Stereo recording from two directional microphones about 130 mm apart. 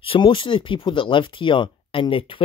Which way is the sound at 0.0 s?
40° left (ahead or behind).